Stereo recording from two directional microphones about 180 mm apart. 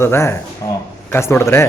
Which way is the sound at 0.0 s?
15° left (ahead or behind).